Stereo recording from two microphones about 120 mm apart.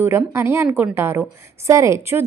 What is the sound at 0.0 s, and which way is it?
A woman's voice, 20° right (ahead or behind).